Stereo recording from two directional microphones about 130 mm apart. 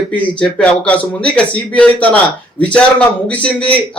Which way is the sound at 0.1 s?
10° left (ahead or behind).